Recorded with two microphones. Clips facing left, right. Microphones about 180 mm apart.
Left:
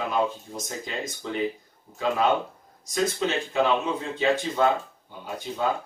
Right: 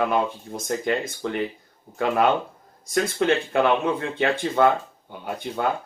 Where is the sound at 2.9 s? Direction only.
60° right (ahead or behind).